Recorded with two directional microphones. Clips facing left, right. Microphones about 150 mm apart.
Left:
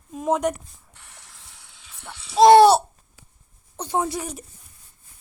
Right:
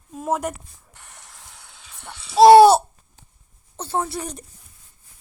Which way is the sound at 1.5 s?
85° right.